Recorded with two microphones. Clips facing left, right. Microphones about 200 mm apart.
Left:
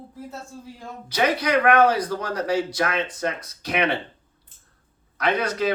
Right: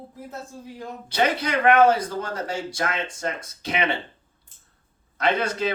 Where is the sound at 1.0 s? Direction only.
25° right (ahead or behind).